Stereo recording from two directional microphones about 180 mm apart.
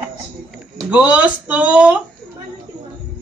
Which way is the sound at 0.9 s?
5° right (ahead or behind).